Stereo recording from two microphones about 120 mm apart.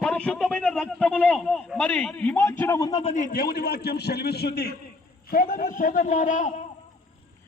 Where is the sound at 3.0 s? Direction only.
80° left.